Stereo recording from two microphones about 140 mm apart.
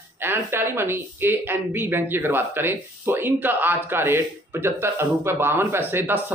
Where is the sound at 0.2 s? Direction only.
15° right (ahead or behind).